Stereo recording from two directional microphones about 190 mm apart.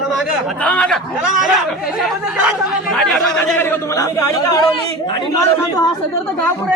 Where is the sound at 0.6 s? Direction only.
5° left (ahead or behind).